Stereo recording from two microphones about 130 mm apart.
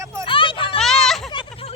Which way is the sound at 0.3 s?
40° left (ahead or behind).